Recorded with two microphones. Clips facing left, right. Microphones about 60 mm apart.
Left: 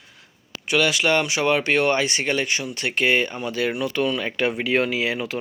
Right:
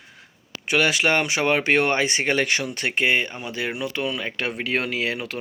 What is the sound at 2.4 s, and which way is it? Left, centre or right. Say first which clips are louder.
Speech: right 2 dB; right.